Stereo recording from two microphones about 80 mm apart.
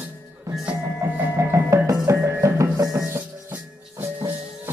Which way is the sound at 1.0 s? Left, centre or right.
Right.